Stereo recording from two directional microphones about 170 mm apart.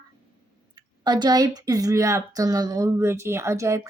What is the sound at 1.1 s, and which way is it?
A woman's voice, 25° right (ahead or behind).